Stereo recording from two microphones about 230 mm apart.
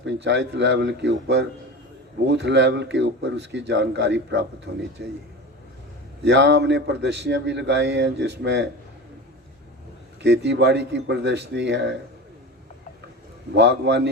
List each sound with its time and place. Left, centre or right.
0.0 s a man's voice: right
6.2 s a man's voice: right
10.2 s a man's voice: right
13.5 s a man's voice: right